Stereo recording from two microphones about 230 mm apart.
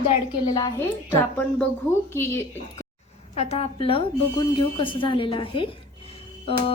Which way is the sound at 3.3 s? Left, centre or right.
Left.